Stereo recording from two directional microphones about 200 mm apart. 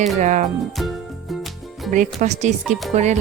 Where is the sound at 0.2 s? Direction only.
40° right (ahead or behind).